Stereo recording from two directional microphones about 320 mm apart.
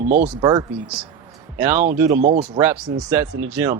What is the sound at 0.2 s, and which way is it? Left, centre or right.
Speech, centre.